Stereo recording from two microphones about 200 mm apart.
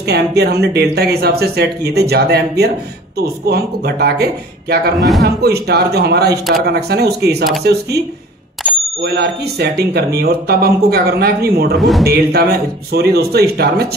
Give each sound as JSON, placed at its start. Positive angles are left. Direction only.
{"t": 0.0, "sound": "speech", "side_deg": -55}
{"t": 4.9, "sound": "a man's voice", "side_deg": 0}
{"t": 5.2, "sound": "speech", "side_deg": -55}
{"t": 9.0, "sound": "speech", "side_deg": -55}
{"t": 11.7, "sound": "a man's voice", "side_deg": 0}
{"t": 12.0, "sound": "speech", "side_deg": -50}